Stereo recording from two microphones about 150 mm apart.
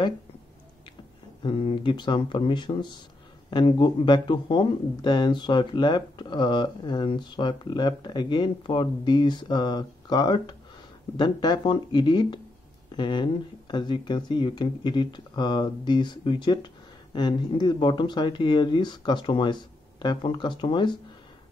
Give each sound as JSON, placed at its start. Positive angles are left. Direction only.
{"t": 1.4, "sound": "speech", "side_deg": 35}